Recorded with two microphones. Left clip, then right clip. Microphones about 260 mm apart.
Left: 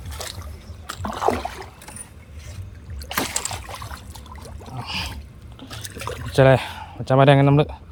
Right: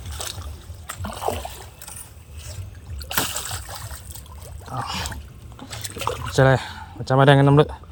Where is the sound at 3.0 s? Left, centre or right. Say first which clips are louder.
Even; right.